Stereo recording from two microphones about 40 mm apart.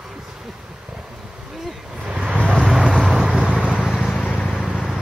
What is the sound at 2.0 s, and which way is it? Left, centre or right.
Vehicle, right.